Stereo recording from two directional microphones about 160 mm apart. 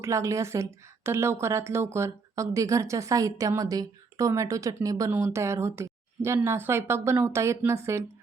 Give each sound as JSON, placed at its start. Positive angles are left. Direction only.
{"t": 0.0, "sound": "a woman's voice", "side_deg": -20}